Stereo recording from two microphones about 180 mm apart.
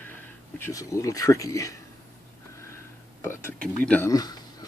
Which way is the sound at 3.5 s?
10° left (ahead or behind).